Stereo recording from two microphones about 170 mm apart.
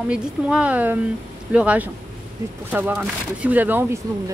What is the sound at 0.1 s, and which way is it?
Speech, 5° right (ahead or behind).